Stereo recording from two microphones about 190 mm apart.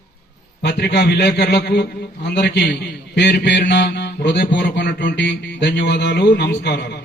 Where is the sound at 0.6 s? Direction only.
60° left (ahead or behind).